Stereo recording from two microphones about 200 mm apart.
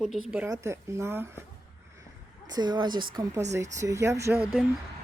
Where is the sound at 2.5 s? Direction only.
20° right (ahead or behind).